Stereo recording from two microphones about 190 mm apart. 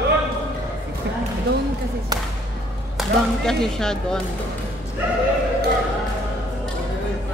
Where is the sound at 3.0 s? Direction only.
5° left (ahead or behind).